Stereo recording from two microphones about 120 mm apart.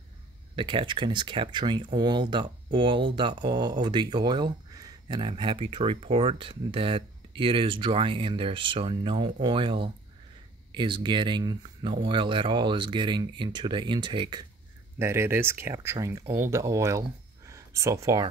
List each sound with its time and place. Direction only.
0.6 s speech: 45° right (ahead or behind)
15.0 s speech: 20° right (ahead or behind)
17.5 s a sound: 25° right (ahead or behind)